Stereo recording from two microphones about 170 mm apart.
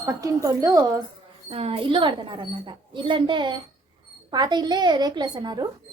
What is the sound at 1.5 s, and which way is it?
A woman's voice, 35° right (ahead or behind).